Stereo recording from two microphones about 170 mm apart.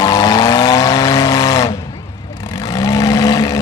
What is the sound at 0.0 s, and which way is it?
Vehicle, 20° left (ahead or behind).